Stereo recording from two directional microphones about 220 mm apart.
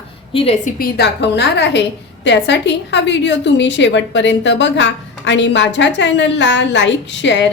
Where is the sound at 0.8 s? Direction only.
50° left (ahead or behind).